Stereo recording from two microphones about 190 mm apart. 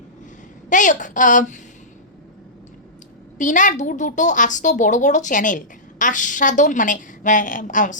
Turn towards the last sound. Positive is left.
turn(degrees=40)  # may be behind; listen again after turning